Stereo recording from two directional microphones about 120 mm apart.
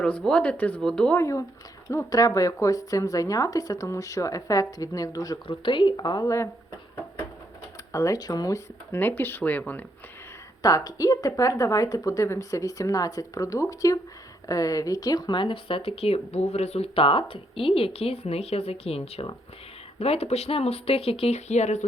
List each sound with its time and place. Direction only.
0.0 s speech: 10° left (ahead or behind)
1.1 s a woman's voice: 25° left (ahead or behind)
5.5 s speech: 40° left (ahead or behind); by 6.5 s 25° left (ahead or behind)
7.9 s speech: 30° left (ahead or behind); by 9.8 s 15° left (ahead or behind)
10.6 s a woman's voice: 30° left (ahead or behind); by 21.8 s 70° left (ahead or behind)